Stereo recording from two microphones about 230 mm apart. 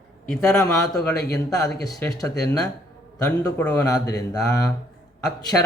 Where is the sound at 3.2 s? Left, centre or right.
Centre.